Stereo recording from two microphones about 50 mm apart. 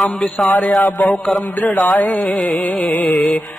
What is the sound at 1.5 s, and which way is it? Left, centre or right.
Music, left.